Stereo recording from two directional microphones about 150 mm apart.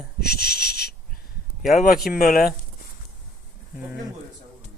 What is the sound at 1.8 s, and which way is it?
Speech, 70° left (ahead or behind).